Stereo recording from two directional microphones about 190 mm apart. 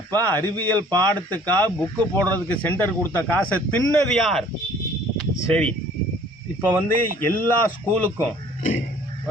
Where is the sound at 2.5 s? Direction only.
10° left (ahead or behind).